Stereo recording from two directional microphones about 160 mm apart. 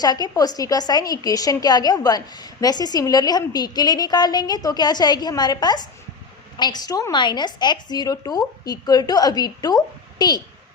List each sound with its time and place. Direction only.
0.0 s a woman's voice: 25° left (ahead or behind)